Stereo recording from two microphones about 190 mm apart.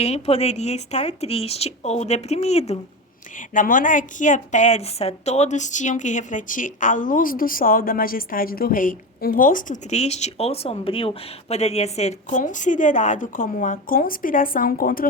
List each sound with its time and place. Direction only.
0.0 s a woman's voice: 35° left (ahead or behind)